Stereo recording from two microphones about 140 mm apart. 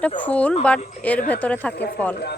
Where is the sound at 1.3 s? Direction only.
10° left (ahead or behind).